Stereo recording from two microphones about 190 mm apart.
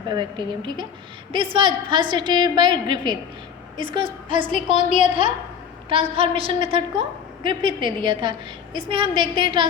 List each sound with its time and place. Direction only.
0.1 s a woman's voice: 25° right (ahead or behind)